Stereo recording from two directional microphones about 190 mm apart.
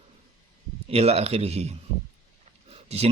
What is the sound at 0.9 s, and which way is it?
Speech, 35° right (ahead or behind).